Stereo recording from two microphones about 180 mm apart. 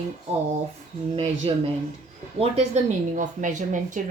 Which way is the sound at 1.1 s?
35° right (ahead or behind).